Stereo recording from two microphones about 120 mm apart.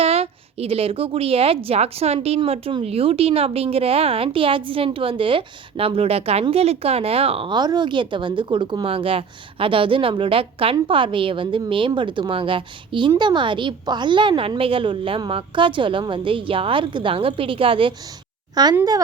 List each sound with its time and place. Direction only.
0.0 s a woman's voice: 55° right (ahead or behind)
18.5 s speech: 35° right (ahead or behind)